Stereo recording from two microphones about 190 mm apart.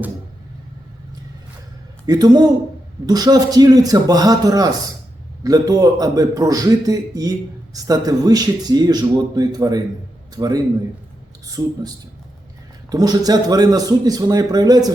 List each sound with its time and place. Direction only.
2.0 s a man's voice: 20° right (ahead or behind)